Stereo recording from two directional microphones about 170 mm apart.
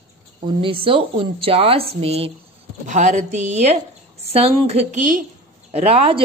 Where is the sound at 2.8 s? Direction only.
45° right (ahead or behind).